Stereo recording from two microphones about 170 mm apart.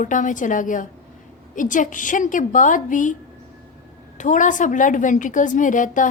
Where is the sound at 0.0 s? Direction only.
50° left (ahead or behind).